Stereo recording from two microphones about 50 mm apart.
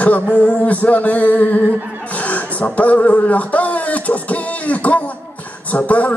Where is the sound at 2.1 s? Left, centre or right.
Left.